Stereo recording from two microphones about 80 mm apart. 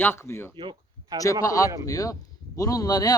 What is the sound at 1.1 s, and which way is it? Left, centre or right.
Speech, right.